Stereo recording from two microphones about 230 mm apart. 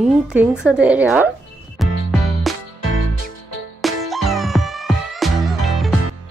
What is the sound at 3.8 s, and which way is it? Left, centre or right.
Music, centre.